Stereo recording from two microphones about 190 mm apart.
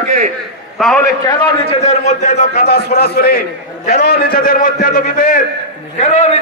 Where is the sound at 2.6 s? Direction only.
55° left (ahead or behind).